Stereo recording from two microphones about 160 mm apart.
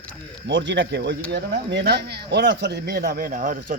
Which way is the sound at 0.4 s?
90° right.